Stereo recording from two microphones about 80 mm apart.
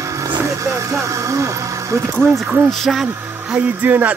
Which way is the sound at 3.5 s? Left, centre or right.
Right.